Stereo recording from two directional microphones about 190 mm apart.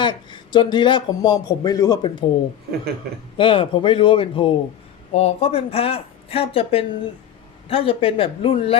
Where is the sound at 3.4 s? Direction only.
25° left (ahead or behind).